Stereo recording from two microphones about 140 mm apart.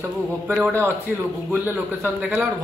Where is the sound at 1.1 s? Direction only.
15° right (ahead or behind).